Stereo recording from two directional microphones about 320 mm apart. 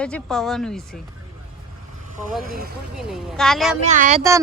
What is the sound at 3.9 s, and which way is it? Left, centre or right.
Speech, right.